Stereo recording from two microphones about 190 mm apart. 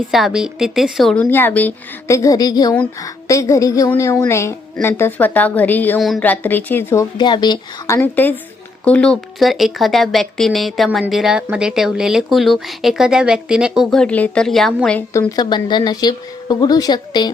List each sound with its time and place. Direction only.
0.1 s a woman's voice: centre (ahead or behind)
15.4 s a woman's voice: 20° left (ahead or behind)